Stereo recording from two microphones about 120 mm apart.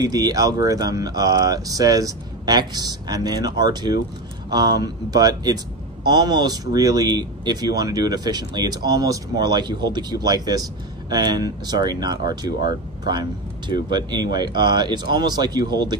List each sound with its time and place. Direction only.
0.0 s speech: 30° right (ahead or behind)